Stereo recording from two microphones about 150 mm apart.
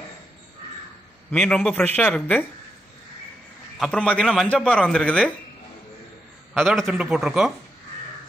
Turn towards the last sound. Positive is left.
turn(degrees=0)  # may be behind; listen again after turning